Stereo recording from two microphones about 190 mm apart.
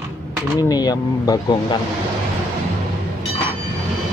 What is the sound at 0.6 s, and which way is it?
Speech, 20° left (ahead or behind).